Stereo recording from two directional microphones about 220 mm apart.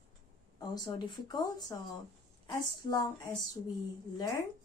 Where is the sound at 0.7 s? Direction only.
15° left (ahead or behind).